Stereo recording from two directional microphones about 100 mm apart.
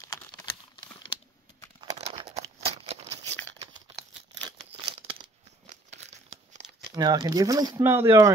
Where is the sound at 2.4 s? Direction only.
90° right.